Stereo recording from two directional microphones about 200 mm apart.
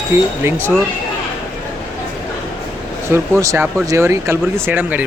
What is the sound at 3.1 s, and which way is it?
Speech, 15° right (ahead or behind).